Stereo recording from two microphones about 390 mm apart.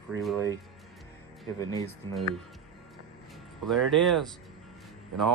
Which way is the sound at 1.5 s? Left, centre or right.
Centre.